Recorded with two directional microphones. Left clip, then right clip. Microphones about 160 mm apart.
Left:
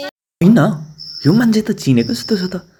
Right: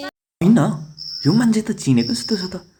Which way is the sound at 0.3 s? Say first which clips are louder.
Left 4 dB; 20° left (ahead or behind).